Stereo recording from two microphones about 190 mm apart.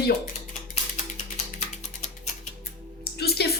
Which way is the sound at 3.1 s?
55° left (ahead or behind).